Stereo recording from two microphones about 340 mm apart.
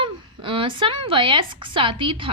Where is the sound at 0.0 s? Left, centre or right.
Centre.